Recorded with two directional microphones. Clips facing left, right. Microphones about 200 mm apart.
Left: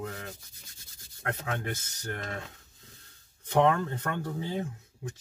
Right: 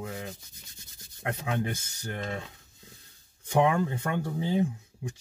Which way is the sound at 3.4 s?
10° right (ahead or behind).